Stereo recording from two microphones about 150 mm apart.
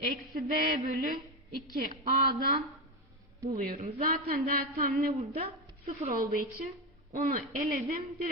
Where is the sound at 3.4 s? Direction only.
65° right (ahead or behind).